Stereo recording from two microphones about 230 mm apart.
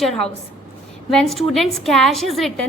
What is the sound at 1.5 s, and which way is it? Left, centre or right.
A woman's voice, centre.